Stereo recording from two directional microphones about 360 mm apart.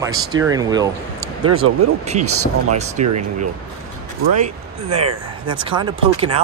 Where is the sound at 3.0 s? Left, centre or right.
Right.